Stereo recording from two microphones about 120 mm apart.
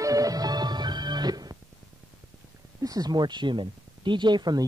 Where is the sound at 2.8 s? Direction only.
30° right (ahead or behind).